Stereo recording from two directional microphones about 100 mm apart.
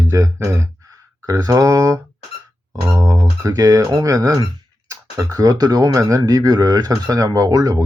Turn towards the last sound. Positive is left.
turn(degrees=-40)  # may be behind; listen again after turning